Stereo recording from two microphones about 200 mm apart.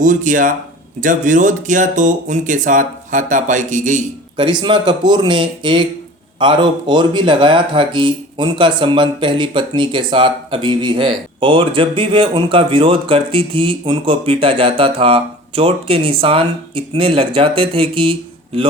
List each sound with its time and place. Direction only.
0.0 s speech: 40° right (ahead or behind)
4.4 s a man's voice: 25° right (ahead or behind)